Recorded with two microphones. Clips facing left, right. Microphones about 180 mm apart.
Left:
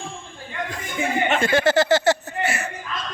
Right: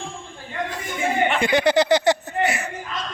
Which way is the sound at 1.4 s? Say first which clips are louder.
Even; 15° right (ahead or behind).